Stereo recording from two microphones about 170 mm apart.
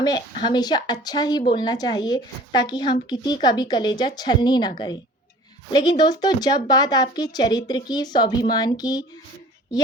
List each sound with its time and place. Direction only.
0.0 s speech: 25° left (ahead or behind)
5.7 s speech: 25° left (ahead or behind)